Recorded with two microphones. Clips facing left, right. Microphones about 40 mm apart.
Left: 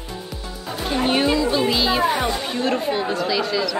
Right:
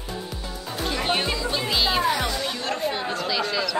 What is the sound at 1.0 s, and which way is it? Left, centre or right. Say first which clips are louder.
Music: left 8 dB; centre.